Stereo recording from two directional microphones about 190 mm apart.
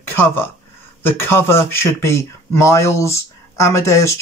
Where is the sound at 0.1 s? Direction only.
10° left (ahead or behind).